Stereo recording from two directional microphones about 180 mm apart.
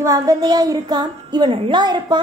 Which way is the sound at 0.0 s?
20° right (ahead or behind).